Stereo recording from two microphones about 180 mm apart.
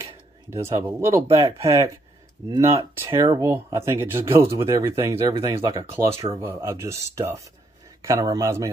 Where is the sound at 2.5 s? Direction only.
15° right (ahead or behind).